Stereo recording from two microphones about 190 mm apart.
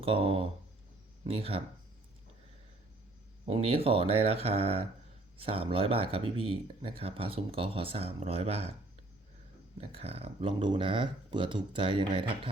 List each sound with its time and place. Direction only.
0.0 s speech: 30° right (ahead or behind)
3.4 s speech: 30° right (ahead or behind)
9.8 s speech: 30° right (ahead or behind)